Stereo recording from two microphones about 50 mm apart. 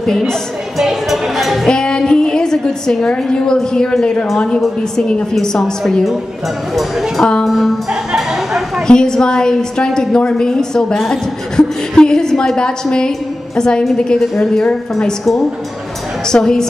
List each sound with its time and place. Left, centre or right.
0.7 s speech: centre
1.7 s a woman's voice: centre
6.7 s speech: centre
8.8 s a woman's voice: centre